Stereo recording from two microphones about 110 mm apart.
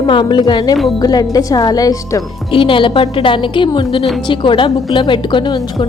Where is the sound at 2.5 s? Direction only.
50° left (ahead or behind).